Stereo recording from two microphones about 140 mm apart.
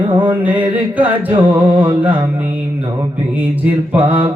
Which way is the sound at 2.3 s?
10° right (ahead or behind).